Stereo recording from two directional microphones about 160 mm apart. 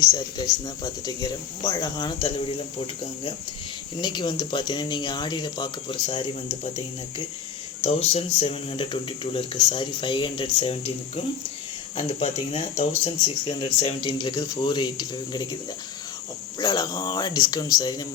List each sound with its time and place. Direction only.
0.0 s speech: 25° left (ahead or behind)
4.0 s speech: 30° left (ahead or behind)
16.6 s speech: 25° left (ahead or behind)